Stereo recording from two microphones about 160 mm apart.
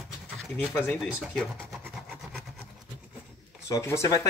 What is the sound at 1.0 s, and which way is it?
Speech, 5° right (ahead or behind).